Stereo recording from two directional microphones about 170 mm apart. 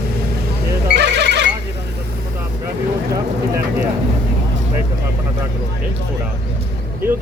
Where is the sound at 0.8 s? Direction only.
80° right.